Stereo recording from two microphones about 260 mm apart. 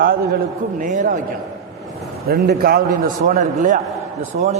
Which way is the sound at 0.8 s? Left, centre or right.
Right.